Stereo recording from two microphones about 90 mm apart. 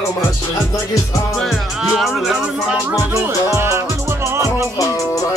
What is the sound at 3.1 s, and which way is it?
Music, 30° right (ahead or behind).